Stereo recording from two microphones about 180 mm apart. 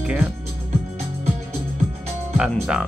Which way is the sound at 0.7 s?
35° right (ahead or behind).